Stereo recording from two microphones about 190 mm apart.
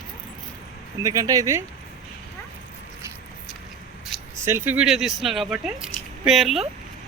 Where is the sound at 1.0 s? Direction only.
20° right (ahead or behind).